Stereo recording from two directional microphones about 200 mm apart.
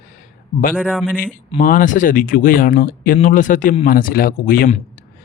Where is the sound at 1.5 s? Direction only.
40° left (ahead or behind).